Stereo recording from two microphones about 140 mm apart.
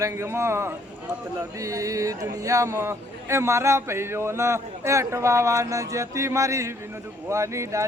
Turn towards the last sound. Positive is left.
turn(degrees=-20)  # may be behind; listen again after turning